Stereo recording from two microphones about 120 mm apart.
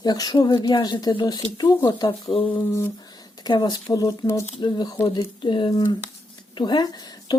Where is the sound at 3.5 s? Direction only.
35° left (ahead or behind).